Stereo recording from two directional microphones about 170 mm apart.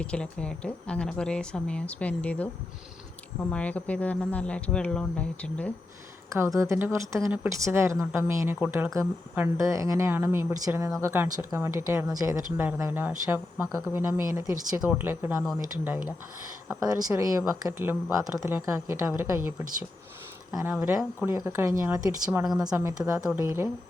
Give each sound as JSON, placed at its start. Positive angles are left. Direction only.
{"t": 0.0, "sound": "speech", "side_deg": 5}
{"t": 3.5, "sound": "speech", "side_deg": 10}
{"t": 6.3, "sound": "a woman's voice", "side_deg": -15}
{"t": 20.7, "sound": "a woman's voice", "side_deg": -5}